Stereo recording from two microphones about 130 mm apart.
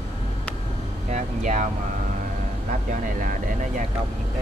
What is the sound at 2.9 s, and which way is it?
Vehicle, 90° right.